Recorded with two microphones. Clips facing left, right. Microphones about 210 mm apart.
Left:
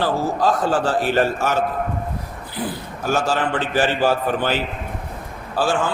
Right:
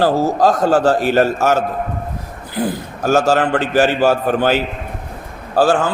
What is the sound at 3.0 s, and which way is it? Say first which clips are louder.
A man's voice: right 7 dB; 45° right (ahead or behind).